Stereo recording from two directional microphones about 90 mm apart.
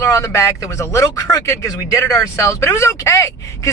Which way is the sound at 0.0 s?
35° left (ahead or behind).